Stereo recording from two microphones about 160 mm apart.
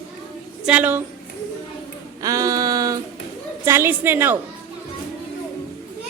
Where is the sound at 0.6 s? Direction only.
10° right (ahead or behind).